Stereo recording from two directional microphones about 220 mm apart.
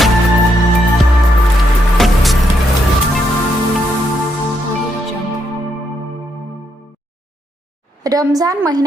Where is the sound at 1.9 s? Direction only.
Centre (ahead or behind).